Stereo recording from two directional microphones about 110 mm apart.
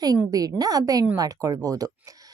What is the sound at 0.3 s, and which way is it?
A woman's voice, 35° right (ahead or behind).